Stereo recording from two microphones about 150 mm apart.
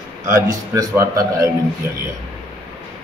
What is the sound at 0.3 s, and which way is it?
A man's voice, 20° right (ahead or behind).